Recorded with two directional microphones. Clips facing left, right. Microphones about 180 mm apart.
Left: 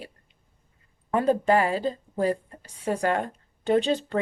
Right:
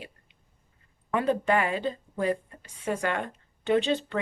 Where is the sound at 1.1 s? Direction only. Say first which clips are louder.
Left 3 dB; 40° left (ahead or behind).